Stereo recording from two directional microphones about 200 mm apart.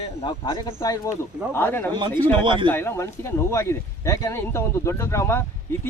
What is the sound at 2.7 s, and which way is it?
Speech, 10° left (ahead or behind).